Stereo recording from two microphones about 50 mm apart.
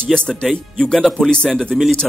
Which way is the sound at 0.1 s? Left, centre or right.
Centre.